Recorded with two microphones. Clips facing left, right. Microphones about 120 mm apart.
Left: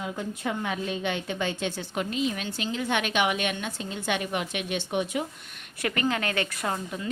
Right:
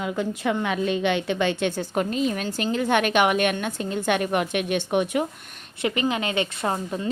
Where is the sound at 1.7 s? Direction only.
45° right (ahead or behind).